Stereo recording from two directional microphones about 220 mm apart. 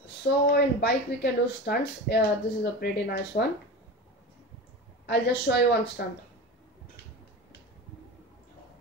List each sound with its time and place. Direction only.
0.5 s speech: 50° left (ahead or behind)
5.0 s speech: 50° left (ahead or behind)